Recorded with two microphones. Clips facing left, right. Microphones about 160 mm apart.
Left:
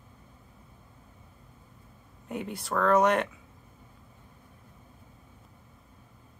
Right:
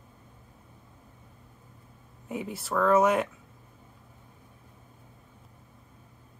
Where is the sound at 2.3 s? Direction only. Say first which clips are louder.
Right 1 dB; centre (ahead or behind).